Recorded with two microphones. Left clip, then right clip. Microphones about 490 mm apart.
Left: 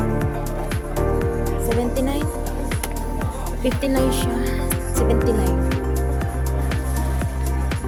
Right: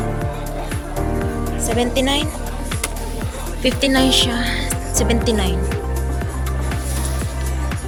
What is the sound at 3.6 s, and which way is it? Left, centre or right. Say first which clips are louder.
Music: right 5 dB; left.